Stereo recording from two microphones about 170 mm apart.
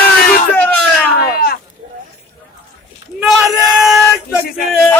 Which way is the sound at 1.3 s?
65° left (ahead or behind).